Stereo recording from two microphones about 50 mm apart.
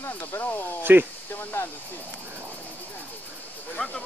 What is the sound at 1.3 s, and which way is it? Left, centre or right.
Hiss, left.